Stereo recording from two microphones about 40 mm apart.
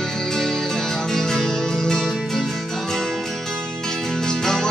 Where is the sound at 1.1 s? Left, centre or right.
Centre.